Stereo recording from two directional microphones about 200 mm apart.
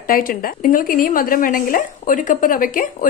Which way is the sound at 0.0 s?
45° left (ahead or behind).